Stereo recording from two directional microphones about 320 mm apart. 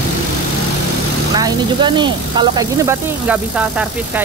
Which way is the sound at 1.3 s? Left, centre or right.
Centre.